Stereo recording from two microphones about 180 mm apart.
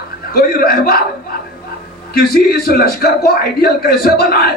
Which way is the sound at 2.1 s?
60° left (ahead or behind).